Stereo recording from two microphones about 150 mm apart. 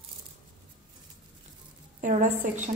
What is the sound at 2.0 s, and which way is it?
Speech, 55° right (ahead or behind).